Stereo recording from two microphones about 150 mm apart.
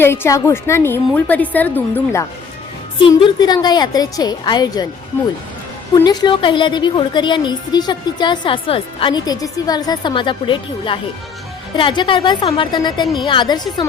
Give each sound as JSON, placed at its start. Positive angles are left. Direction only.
{"t": 0.0, "sound": "a woman's voice", "side_deg": 15}
{"t": 3.0, "sound": "a woman's voice", "side_deg": 35}
{"t": 6.1, "sound": "a woman's voice", "side_deg": 30}